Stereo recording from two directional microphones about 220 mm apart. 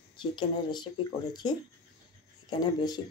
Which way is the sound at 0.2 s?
20° left (ahead or behind).